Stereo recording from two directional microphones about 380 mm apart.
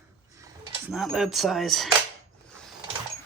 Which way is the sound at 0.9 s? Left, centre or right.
Centre.